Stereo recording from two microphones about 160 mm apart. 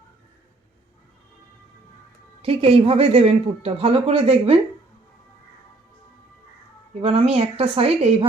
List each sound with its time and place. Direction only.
2.4 s speech: 35° right (ahead or behind)
7.0 s speech: 35° right (ahead or behind)